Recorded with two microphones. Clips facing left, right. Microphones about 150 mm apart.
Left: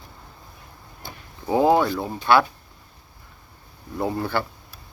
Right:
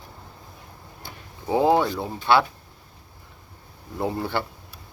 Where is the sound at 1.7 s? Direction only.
20° right (ahead or behind).